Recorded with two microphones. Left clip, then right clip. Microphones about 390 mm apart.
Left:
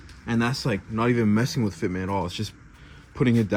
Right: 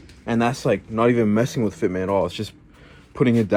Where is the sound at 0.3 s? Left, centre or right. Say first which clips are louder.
Right 6 dB; centre.